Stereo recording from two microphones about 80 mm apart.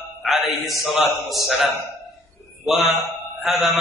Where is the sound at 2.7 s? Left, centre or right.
Centre.